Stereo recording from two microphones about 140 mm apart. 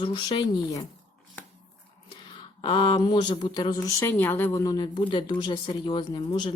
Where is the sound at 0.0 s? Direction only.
35° left (ahead or behind).